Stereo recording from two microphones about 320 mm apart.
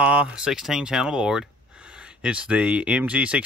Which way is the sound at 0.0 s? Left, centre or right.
Centre.